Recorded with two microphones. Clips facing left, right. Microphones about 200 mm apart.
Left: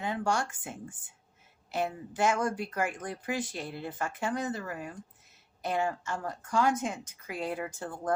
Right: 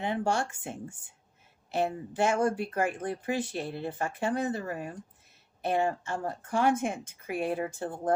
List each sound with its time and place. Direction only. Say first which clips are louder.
0.0 s speech: right 2 dB; 25° right (ahead or behind)